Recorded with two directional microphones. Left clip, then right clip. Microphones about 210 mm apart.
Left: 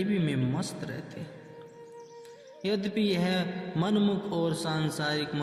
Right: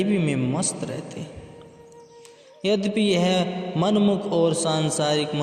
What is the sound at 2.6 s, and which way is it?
A man's voice, 35° right (ahead or behind).